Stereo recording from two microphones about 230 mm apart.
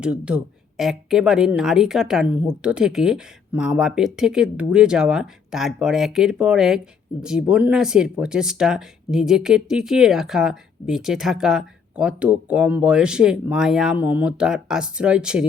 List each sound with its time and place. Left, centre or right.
0.0 s speech: centre